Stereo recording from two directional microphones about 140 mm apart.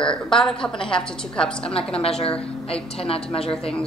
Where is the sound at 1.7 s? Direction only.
45° left (ahead or behind).